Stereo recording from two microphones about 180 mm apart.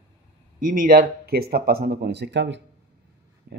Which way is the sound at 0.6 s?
50° right (ahead or behind).